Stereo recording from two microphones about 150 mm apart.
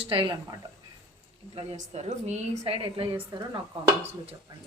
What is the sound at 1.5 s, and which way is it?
A woman's voice, 45° right (ahead or behind).